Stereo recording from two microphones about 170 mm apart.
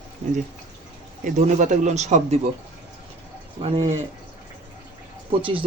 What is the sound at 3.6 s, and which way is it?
Speech, 35° right (ahead or behind).